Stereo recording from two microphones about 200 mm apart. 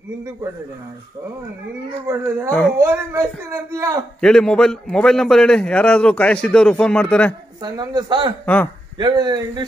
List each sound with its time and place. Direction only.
2.0 s speech: 15° right (ahead or behind)
4.2 s a man's voice: 5° left (ahead or behind)
7.6 s speech: 20° right (ahead or behind)